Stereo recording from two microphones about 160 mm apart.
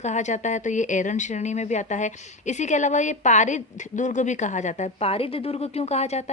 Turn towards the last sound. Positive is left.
turn(degrees=45)  # may be behind; listen again after turning